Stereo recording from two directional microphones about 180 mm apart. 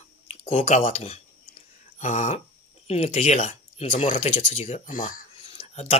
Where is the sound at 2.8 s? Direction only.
35° left (ahead or behind).